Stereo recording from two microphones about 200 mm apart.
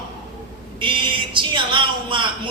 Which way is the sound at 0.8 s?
25° right (ahead or behind).